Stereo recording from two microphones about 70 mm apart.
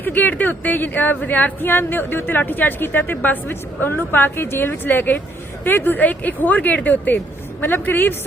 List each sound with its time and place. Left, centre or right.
0.0 s speech: left